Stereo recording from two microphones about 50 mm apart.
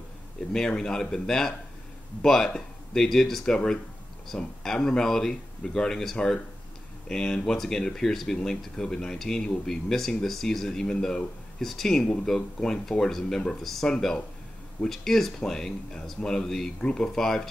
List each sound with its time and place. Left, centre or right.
0.5 s speech: centre
6.1 s speech: centre